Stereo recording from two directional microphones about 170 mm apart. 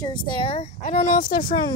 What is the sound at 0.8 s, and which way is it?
Speech, 45° left (ahead or behind).